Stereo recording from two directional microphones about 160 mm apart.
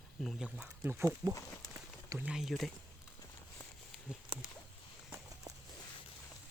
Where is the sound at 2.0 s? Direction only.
10° right (ahead or behind).